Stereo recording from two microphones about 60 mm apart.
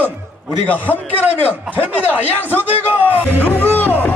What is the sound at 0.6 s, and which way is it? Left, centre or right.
Speech, left.